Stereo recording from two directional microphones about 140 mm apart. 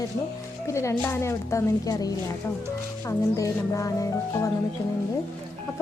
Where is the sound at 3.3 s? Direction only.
25° left (ahead or behind).